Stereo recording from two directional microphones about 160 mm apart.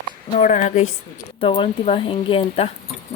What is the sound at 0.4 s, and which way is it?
Speech, 50° left (ahead or behind).